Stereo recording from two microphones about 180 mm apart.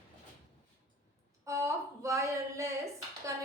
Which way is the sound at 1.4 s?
15° right (ahead or behind).